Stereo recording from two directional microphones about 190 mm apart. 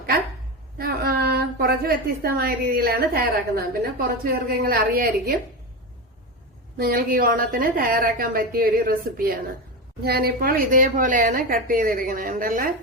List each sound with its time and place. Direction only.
0.8 s a woman's voice: 50° right (ahead or behind)
6.7 s a woman's voice: 50° right (ahead or behind)